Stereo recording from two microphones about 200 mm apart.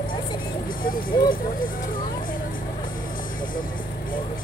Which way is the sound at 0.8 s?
45° left (ahead or behind).